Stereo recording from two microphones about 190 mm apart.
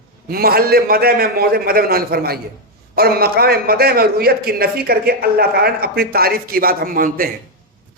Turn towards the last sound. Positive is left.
turn(degrees=-50)  # may be behind; listen again after turning